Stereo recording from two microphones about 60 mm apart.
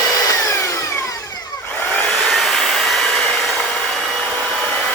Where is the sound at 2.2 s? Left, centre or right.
Centre.